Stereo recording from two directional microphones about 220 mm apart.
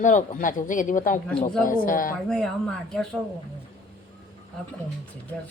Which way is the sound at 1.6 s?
40° left (ahead or behind).